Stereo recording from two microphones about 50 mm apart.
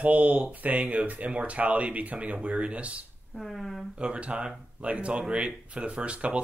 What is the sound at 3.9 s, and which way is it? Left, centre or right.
Speech, right.